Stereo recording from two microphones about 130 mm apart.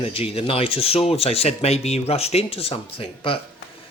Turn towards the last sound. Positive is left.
turn(degrees=45)  # may be behind; listen again after turning